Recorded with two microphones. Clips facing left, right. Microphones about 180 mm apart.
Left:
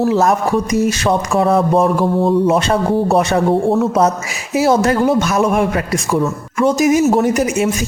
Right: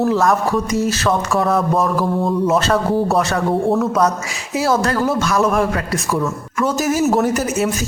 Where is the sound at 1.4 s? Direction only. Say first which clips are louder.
Left 6 dB; 30° left (ahead or behind).